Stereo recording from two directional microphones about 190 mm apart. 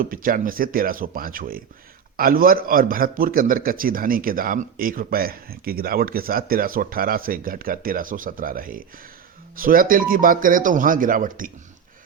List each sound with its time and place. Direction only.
0.0 s a man's voice: 45° right (ahead or behind)